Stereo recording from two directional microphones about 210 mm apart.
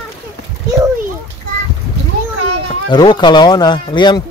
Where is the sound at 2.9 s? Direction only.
20° left (ahead or behind).